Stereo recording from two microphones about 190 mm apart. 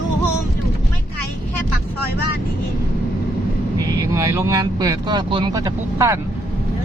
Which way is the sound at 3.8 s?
15° right (ahead or behind).